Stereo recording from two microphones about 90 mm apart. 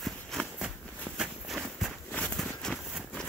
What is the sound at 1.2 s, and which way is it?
Walk, 5° right (ahead or behind).